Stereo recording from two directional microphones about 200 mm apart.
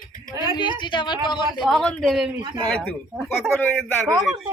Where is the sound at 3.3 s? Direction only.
10° left (ahead or behind).